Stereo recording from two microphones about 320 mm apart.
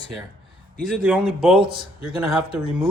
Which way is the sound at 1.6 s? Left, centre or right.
Centre.